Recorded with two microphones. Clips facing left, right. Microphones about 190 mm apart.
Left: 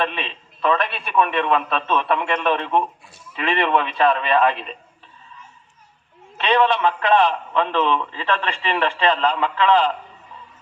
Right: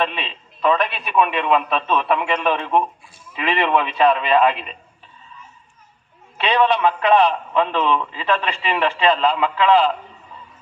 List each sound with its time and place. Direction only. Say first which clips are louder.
0.0 s a man's voice: right 1 dB; 15° right (ahead or behind)
6.3 s a man's voice: even; 15° right (ahead or behind)